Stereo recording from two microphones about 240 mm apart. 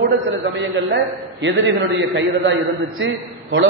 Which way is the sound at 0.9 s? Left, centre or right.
Right.